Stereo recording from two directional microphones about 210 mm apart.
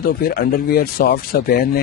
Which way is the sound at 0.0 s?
45° left (ahead or behind).